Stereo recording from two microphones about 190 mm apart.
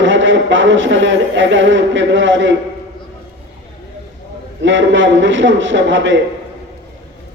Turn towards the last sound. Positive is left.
turn(degrees=-75)  # may be behind; listen again after turning